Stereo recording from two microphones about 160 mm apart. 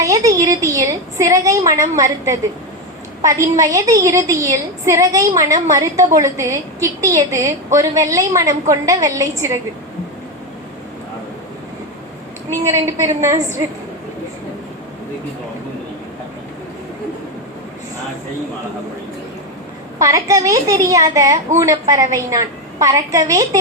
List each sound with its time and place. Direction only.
0.0 s a woman's voice: 20° right (ahead or behind)
12.5 s a woman's voice: 20° right (ahead or behind)
20.0 s a woman's voice: 20° right (ahead or behind)